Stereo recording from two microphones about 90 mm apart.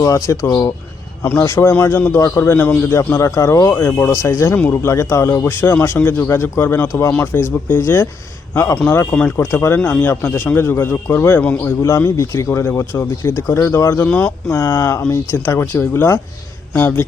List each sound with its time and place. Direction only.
0.0 s speech: 35° left (ahead or behind); by 2.8 s 20° left (ahead or behind)
2.9 s speech: 30° left (ahead or behind)
3.8 s speech: 20° left (ahead or behind)
11.8 s speech: 30° left (ahead or behind)
14.1 s speech: 15° left (ahead or behind)
14.5 s speech: 30° left (ahead or behind)